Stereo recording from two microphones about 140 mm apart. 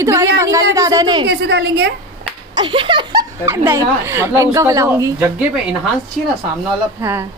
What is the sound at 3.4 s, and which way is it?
A woman's voice, 20° right (ahead or behind).